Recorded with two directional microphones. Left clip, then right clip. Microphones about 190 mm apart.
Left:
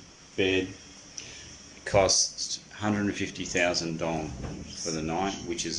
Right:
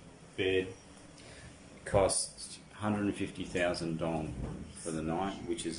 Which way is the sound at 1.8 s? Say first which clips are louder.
Left 6 dB; 5° right (ahead or behind).